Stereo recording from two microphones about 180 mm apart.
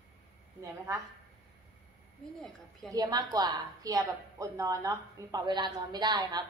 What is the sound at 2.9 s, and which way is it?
A woman's voice, 20° right (ahead or behind).